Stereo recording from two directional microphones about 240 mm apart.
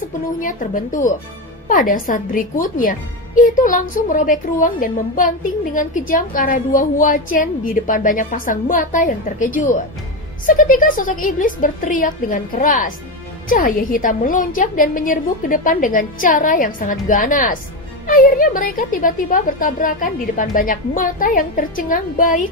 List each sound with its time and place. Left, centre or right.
0.4 s a woman's voice: left